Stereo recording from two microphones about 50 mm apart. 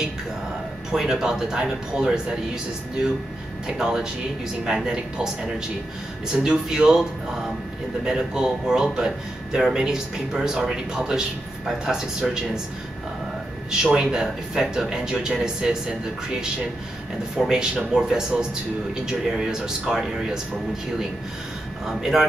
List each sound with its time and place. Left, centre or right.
0.9 s speech: centre
3.6 s speech: centre
13.8 s speech: centre
17.5 s speech: centre
21.8 s speech: centre